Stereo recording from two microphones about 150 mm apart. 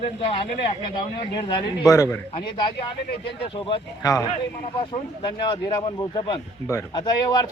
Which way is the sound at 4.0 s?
20° left (ahead or behind).